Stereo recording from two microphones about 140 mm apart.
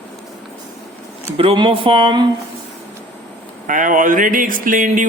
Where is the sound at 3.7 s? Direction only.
70° right (ahead or behind).